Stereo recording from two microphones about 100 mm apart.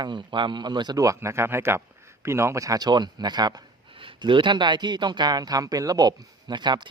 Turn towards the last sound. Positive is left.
turn(degrees=-50)  # may be behind; listen again after turning